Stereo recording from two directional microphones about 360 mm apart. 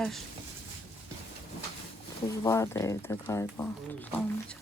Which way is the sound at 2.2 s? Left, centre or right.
Centre.